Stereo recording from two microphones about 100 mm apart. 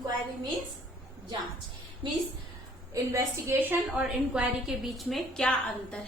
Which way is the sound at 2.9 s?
30° right (ahead or behind).